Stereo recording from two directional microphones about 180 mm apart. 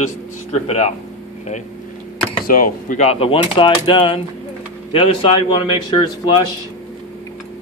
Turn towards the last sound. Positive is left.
turn(degrees=25)  # may be behind; listen again after turning